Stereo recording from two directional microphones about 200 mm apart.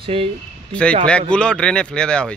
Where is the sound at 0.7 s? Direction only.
5° left (ahead or behind).